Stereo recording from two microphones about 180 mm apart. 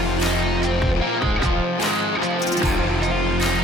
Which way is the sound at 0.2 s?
Centre (ahead or behind).